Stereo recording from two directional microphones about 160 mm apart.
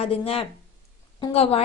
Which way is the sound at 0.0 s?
40° left (ahead or behind).